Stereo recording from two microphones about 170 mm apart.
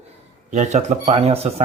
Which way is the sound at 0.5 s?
45° right (ahead or behind).